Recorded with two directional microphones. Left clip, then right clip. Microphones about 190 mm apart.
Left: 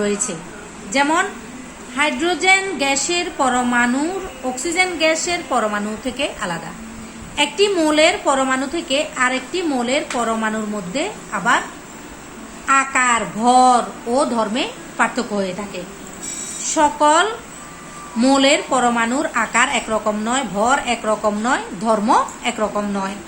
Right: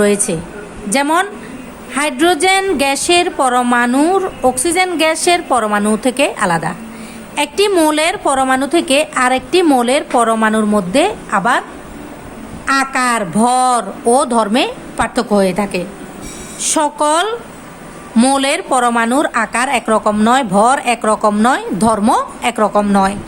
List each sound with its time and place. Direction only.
0.0 s a woman's voice: 65° right (ahead or behind)
12.6 s a woman's voice: 60° right (ahead or behind)
16.7 s a woman's voice: 60° right (ahead or behind)